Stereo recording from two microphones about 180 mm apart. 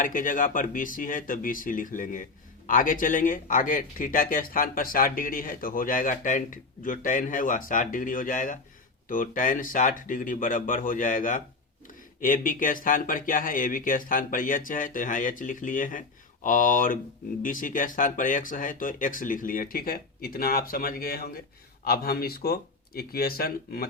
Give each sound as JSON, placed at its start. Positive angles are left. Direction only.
{"t": 0.0, "sound": "speech", "side_deg": 45}